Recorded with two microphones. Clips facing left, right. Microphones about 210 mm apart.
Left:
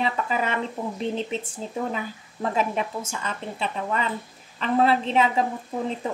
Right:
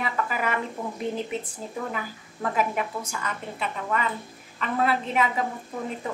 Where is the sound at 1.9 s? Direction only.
25° left (ahead or behind).